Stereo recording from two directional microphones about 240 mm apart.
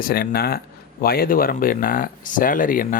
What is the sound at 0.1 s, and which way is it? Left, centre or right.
Speech, left.